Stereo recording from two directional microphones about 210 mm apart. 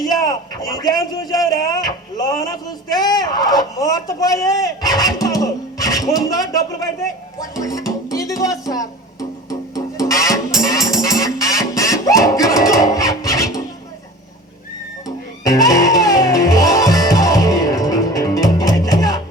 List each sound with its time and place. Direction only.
0.1 s speech: 20° left (ahead or behind)
5.2 s music: 15° left (ahead or behind)
15.0 s music: 15° left (ahead or behind)